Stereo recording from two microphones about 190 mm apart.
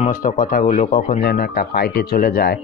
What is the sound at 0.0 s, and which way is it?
Speech, 45° left (ahead or behind).